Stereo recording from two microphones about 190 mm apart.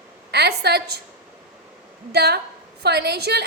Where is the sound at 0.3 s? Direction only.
60° right (ahead or behind).